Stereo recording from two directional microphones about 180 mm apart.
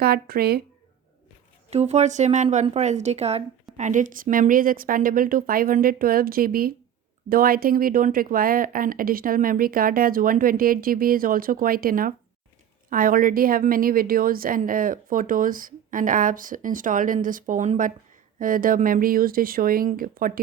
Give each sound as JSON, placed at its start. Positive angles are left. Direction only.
{"t": 0.0, "sound": "speech", "side_deg": -60}
{"t": 1.7, "sound": "speech", "side_deg": -35}